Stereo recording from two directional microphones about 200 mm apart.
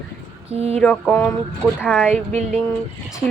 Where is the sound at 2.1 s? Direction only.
35° right (ahead or behind).